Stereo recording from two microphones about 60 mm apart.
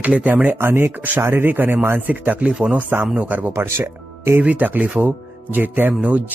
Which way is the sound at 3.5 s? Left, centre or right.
Right.